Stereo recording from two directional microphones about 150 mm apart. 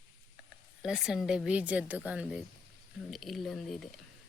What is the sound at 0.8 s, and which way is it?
Speech, 5° right (ahead or behind).